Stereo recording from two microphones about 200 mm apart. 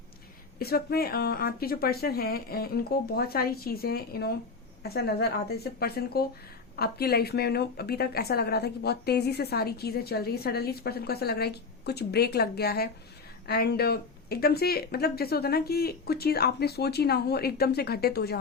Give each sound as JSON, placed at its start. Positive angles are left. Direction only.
{"t": 0.6, "sound": "a woman's voice", "side_deg": 50}